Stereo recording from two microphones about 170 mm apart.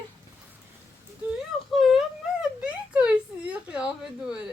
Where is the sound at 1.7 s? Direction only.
Centre (ahead or behind).